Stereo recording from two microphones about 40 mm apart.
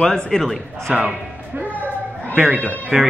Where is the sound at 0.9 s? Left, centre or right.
Right.